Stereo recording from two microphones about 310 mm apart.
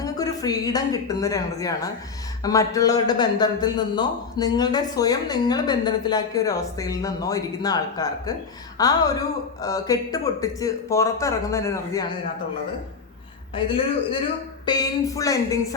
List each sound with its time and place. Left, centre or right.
0.0 s a man's voice: centre
13.7 s a man's voice: centre